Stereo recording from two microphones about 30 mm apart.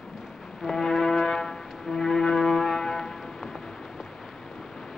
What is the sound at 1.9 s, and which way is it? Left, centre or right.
Music, centre.